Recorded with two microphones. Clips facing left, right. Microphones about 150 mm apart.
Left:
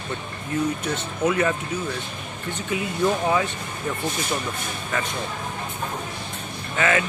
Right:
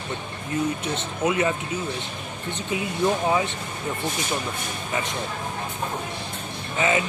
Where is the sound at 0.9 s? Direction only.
20° right (ahead or behind).